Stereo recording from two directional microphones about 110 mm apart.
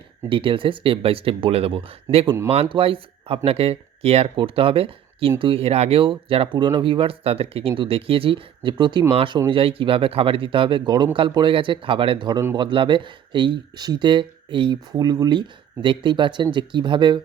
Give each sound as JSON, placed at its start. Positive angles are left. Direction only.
{"t": 0.3, "sound": "speech", "side_deg": -50}